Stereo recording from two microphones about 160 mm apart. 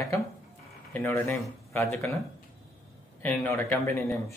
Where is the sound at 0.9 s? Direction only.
15° left (ahead or behind).